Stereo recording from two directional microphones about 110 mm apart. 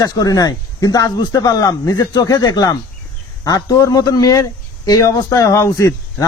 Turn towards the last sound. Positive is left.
turn(degrees=30)  # may be behind; listen again after turning